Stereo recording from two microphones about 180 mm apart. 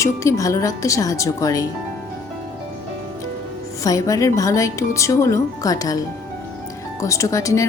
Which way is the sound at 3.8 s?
20° left (ahead or behind).